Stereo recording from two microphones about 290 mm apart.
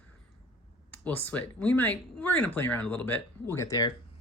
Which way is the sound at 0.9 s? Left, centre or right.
Centre.